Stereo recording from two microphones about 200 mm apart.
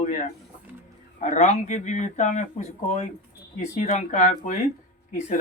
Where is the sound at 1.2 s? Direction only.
35° left (ahead or behind).